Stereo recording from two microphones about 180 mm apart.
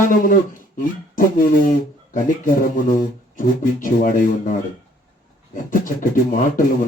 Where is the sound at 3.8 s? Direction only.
45° left (ahead or behind).